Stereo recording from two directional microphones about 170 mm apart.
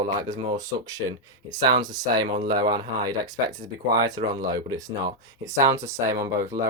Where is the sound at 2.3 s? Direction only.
55° right (ahead or behind).